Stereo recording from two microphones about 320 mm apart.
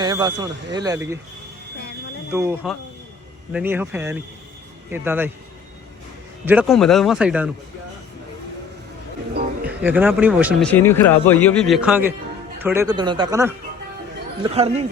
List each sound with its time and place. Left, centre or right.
0.0 s speech: centre
2.3 s speech: centre
6.4 s speech: centre
9.6 s speech: centre